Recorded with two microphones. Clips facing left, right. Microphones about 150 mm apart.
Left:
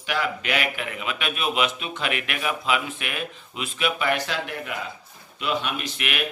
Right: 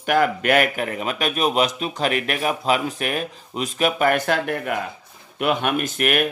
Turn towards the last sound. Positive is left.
turn(degrees=-45)  # may be behind; listen again after turning